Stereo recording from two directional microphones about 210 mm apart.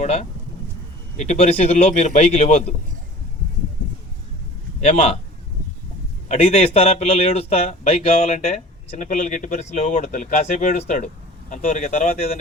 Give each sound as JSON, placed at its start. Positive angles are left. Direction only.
{"t": 0.0, "sound": "speech", "side_deg": 30}
{"t": 4.8, "sound": "speech", "side_deg": 30}
{"t": 6.2, "sound": "speech", "side_deg": 30}